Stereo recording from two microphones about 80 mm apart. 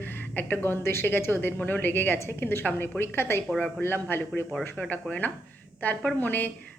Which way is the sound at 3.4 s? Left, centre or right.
Centre.